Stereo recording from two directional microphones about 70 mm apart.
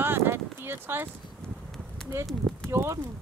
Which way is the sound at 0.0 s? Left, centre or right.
Right.